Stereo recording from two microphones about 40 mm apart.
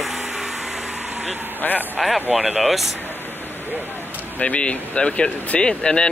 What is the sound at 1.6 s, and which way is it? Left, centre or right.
Speech, left.